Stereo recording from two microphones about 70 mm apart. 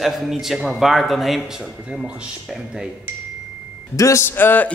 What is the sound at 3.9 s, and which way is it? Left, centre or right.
Speech, left.